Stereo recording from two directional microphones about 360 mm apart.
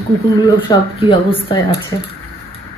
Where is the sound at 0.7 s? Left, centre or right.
Centre.